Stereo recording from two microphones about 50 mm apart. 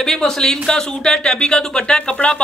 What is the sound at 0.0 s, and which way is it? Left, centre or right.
Speech, centre.